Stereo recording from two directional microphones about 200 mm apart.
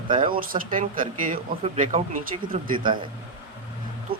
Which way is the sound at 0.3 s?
45° right (ahead or behind).